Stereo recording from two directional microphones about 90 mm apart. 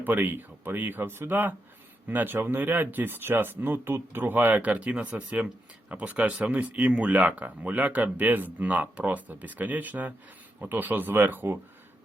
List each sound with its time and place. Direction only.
0.0 s speech: 20° right (ahead or behind)